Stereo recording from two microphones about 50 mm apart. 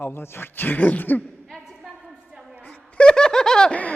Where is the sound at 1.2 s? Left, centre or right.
Centre.